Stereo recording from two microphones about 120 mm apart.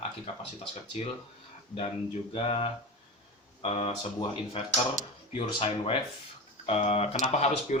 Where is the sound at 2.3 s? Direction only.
55° left (ahead or behind).